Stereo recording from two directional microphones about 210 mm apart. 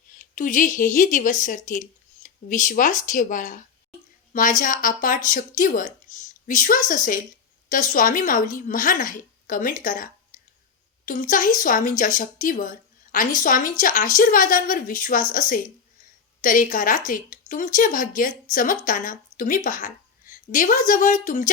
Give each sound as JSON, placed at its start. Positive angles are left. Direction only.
{"t": 0.2, "sound": "a woman's voice", "side_deg": 35}